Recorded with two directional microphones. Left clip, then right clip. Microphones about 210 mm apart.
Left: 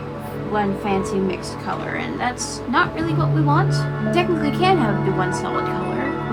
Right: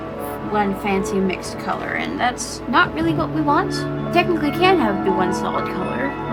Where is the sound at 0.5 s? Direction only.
40° right (ahead or behind).